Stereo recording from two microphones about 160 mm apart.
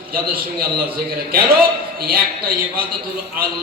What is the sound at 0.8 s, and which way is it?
A man's voice, 65° right (ahead or behind).